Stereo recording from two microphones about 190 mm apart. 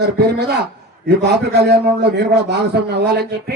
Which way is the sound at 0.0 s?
60° right (ahead or behind).